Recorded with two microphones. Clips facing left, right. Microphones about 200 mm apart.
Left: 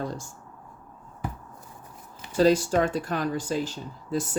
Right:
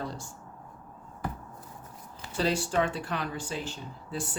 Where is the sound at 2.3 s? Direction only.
40° left (ahead or behind).